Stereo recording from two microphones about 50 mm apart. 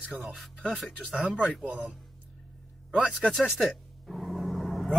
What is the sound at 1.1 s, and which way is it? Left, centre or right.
Speech, right.